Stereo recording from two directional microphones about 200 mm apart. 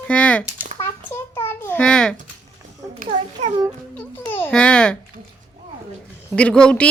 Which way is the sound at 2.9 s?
35° right (ahead or behind).